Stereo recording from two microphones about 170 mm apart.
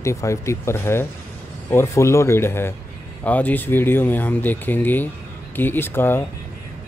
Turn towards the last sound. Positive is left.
turn(degrees=10)  # may be behind; listen again after turning